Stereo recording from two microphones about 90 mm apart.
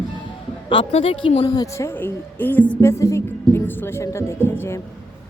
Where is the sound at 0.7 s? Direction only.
80° left.